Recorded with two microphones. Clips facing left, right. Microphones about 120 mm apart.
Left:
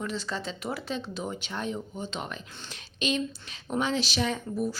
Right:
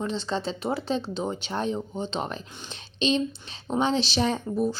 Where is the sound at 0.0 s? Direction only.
25° right (ahead or behind).